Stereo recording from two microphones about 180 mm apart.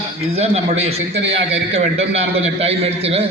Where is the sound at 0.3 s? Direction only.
35° right (ahead or behind).